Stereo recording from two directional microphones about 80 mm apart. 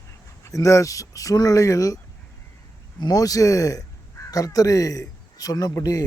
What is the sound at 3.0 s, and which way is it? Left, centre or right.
A man's voice, left.